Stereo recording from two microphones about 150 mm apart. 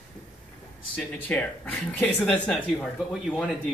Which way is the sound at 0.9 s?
10° left (ahead or behind).